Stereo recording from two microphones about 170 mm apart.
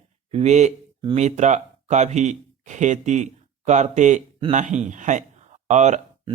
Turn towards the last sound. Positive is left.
turn(degrees=-45)  # may be behind; listen again after turning